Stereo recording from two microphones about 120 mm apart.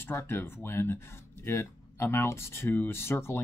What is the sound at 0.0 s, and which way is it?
Speech, 20° left (ahead or behind).